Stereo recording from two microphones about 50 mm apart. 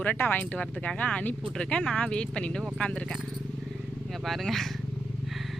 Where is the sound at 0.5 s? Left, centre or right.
Left.